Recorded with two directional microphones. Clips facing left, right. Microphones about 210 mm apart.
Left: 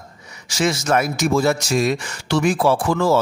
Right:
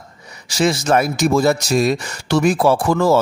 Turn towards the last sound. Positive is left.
turn(degrees=-40)  # may be behind; listen again after turning